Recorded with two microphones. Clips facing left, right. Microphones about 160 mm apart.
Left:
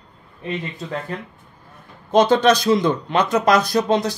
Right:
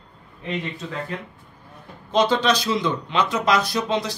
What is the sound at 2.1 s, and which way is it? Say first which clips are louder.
Speech: left 5 dB; 50° left (ahead or behind).